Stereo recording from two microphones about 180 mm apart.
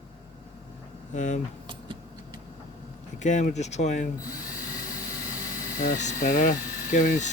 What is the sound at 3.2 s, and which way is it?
Speech, 40° left (ahead or behind).